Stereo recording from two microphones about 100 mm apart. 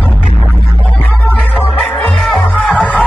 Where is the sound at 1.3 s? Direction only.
15° left (ahead or behind).